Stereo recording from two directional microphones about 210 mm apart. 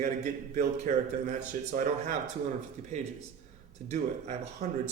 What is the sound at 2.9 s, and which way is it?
Speech, 35° right (ahead or behind).